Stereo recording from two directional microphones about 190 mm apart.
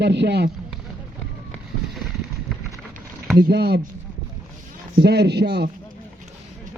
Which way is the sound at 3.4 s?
60° right (ahead or behind).